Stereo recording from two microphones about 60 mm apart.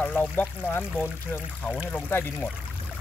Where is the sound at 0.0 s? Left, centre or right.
Left.